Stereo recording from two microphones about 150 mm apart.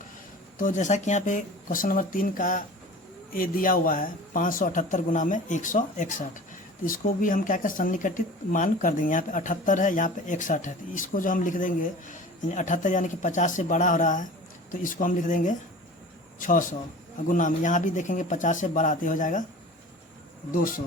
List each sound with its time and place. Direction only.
0.6 s speech: 55° left (ahead or behind)
20.5 s speech: 65° left (ahead or behind)